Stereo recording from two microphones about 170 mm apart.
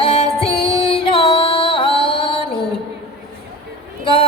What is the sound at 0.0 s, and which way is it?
Music, 35° left (ahead or behind).